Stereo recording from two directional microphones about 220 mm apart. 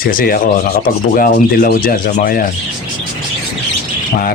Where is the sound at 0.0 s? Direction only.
40° left (ahead or behind).